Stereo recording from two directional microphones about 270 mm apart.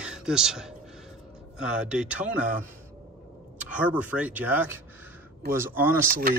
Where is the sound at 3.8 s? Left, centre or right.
Centre.